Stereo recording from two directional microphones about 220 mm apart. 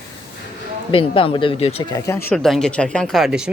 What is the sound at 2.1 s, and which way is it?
Speech, 10° left (ahead or behind).